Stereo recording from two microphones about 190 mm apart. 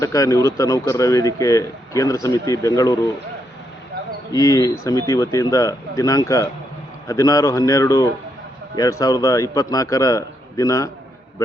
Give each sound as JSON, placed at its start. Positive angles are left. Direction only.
{"t": 0.0, "sound": "speech", "side_deg": 15}
{"t": 4.3, "sound": "speech", "side_deg": 15}